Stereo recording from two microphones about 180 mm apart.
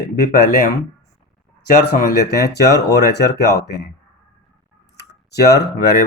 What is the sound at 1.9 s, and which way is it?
Speech, 65° left (ahead or behind).